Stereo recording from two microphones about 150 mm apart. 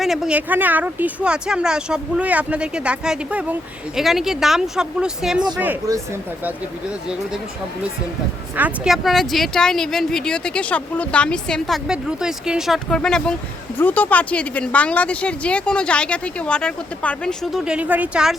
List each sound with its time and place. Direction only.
0.0 s speech: centre (ahead or behind)
5.9 s speech: 25° right (ahead or behind)
8.5 s a woman's voice: 10° right (ahead or behind)